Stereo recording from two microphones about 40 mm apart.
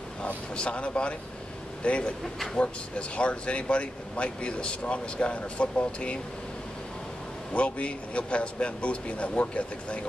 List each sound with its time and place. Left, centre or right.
0.2 s speech: left
7.5 s speech: left